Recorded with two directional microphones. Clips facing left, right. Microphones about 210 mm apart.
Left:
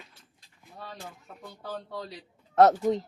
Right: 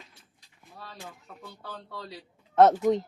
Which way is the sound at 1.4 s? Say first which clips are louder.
Left 5 dB; 15° left (ahead or behind).